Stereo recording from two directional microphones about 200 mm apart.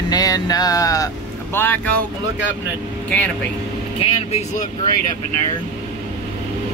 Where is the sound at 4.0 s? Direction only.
30° left (ahead or behind).